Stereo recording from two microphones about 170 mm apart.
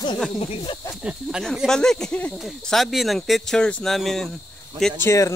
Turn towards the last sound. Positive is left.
turn(degrees=20)  # may be behind; listen again after turning